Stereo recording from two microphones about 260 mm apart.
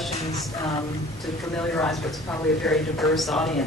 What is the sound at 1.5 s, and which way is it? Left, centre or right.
Speech, centre.